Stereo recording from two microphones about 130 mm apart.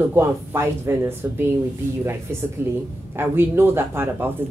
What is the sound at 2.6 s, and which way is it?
A man's voice, 15° right (ahead or behind).